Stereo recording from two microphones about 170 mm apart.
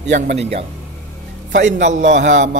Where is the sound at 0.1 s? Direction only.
40° right (ahead or behind).